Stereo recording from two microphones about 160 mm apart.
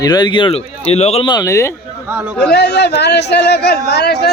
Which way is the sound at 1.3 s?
20° left (ahead or behind).